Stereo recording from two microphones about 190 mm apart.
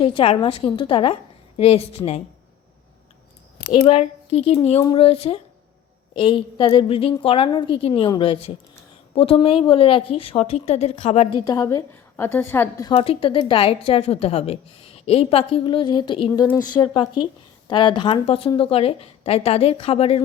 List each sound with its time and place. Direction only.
0.0 s a woman's voice: 25° left (ahead or behind)
3.8 s a woman's voice: 30° left (ahead or behind)
11.4 s a woman's voice: 20° left (ahead or behind)
12.9 s a woman's voice: 30° left (ahead or behind)
16.7 s speech: 5° left (ahead or behind)
17.7 s speech: 25° left (ahead or behind)